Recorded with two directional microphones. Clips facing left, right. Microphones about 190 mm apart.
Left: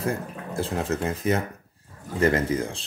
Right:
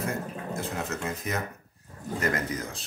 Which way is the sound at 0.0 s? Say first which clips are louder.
Left 3 dB; 30° left (ahead or behind).